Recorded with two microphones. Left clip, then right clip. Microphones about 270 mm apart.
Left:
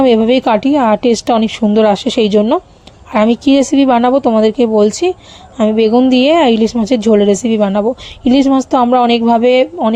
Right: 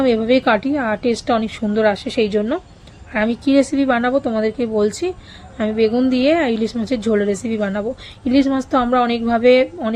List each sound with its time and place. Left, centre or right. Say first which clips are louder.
0.0 s a woman's voice: left 6 dB; left